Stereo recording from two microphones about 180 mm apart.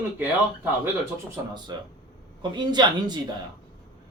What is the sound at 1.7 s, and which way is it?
Speech, 25° right (ahead or behind).